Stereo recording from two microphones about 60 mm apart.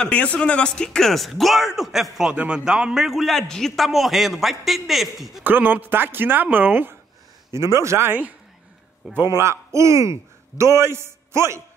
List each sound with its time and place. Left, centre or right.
0.0 s speech: left
0.8 s a man's voice: centre
2.3 s a man's voice: centre
5.4 s speech: right
7.5 s speech: right
8.1 s a woman's voice: right
9.3 s a man's voice: right